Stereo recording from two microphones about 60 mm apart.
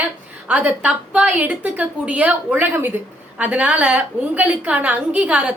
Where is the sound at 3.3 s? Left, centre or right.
Right.